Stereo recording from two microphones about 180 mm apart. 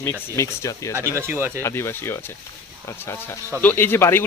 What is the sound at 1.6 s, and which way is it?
Speech, 15° left (ahead or behind).